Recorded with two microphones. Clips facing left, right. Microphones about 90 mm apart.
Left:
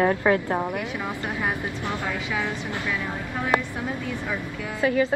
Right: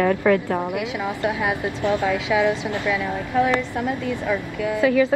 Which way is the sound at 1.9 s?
20° right (ahead or behind).